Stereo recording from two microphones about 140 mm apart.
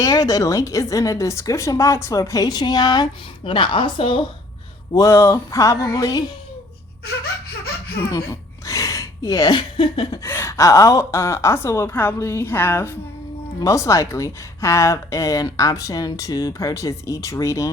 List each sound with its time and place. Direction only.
0.0 s a woman's voice: 25° left (ahead or behind)
4.9 s a woman's voice: 20° left (ahead or behind)
8.3 s a sound: 25° left (ahead or behind); by 10.2 s 40° left (ahead or behind)
10.2 s a woman's voice: 20° left (ahead or behind)